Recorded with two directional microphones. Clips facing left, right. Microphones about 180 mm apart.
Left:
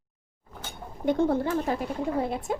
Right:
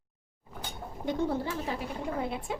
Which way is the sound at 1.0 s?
55° left (ahead or behind).